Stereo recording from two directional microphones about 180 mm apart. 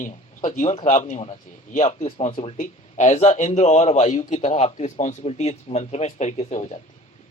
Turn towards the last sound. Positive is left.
turn(degrees=40)  # may be behind; listen again after turning